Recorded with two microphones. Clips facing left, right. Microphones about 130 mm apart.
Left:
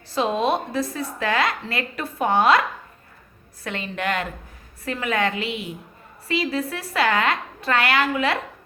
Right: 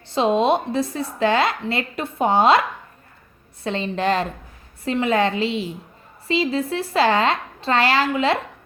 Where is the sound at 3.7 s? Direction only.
30° right (ahead or behind).